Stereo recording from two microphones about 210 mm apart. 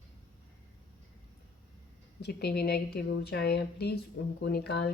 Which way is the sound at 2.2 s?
50° left (ahead or behind).